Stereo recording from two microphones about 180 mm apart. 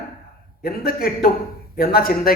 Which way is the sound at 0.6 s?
55° left (ahead or behind).